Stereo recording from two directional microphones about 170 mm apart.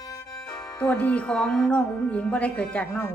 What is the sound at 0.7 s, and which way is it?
Speech, 10° left (ahead or behind).